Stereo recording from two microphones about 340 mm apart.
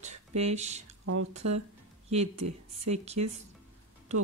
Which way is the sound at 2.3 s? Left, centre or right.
Right.